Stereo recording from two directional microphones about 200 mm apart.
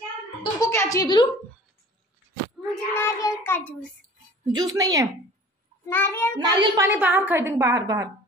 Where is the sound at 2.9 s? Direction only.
10° left (ahead or behind).